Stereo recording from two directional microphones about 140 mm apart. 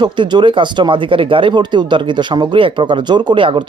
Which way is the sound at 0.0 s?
30° right (ahead or behind).